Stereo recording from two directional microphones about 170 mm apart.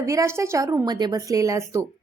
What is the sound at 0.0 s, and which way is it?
A woman's voice, 20° right (ahead or behind).